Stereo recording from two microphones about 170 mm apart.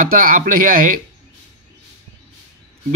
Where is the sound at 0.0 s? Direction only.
55° right (ahead or behind).